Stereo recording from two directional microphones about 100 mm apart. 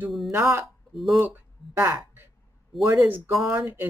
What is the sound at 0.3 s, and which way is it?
Speech, 25° right (ahead or behind).